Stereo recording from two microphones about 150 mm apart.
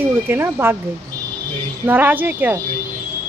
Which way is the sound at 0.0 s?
15° right (ahead or behind).